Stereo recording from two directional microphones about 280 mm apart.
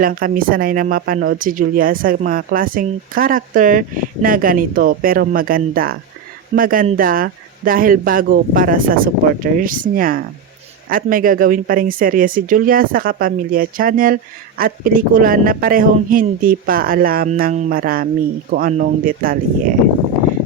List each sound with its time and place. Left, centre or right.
0.0 s speech: right